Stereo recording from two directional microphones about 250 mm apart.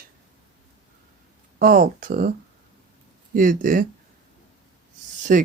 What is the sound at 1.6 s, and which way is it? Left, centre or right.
Speech, right.